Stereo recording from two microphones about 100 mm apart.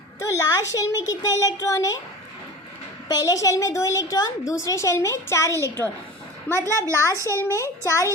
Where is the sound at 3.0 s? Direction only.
35° left (ahead or behind).